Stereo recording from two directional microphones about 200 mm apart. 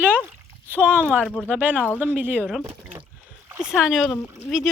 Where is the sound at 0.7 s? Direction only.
10° right (ahead or behind).